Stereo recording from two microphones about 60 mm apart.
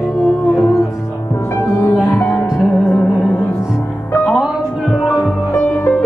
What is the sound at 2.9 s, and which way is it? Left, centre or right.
Music, left.